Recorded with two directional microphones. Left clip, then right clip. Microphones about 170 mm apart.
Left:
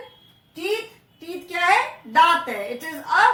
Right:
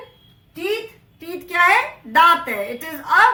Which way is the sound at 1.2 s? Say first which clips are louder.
Right 6 dB; 20° right (ahead or behind).